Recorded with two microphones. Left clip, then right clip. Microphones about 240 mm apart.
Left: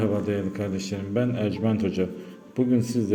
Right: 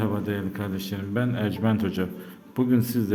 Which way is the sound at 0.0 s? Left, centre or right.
Centre.